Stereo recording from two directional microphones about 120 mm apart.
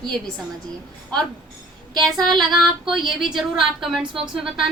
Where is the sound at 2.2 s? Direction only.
Centre (ahead or behind).